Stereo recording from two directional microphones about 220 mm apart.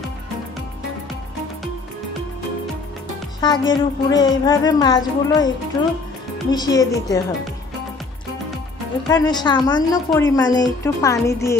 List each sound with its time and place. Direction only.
3.3 s a woman's voice: 20° left (ahead or behind)
9.1 s a woman's voice: 20° left (ahead or behind)